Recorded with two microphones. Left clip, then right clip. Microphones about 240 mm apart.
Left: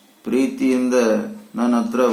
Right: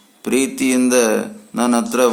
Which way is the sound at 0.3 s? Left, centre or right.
Right.